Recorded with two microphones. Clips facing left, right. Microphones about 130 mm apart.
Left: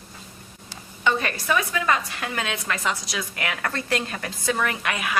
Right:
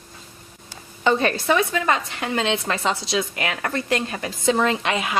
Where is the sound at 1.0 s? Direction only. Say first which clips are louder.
Right 5 dB; 30° right (ahead or behind).